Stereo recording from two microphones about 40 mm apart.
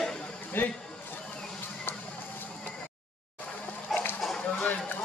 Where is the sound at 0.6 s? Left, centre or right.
Left.